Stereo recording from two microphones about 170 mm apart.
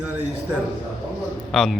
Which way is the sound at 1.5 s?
Centre (ahead or behind).